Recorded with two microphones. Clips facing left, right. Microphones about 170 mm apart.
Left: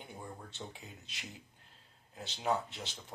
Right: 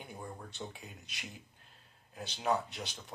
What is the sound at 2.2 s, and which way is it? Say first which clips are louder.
Speech: right 1 dB; 20° left (ahead or behind).